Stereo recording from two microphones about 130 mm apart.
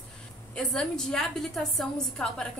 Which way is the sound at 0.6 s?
5° left (ahead or behind).